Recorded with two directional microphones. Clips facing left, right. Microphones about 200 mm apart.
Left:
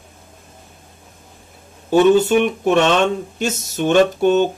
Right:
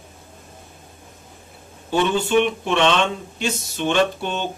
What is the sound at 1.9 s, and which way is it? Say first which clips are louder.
Speech: left 6 dB; 45° left (ahead or behind).